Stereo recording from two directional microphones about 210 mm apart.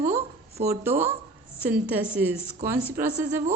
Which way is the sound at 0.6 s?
10° right (ahead or behind).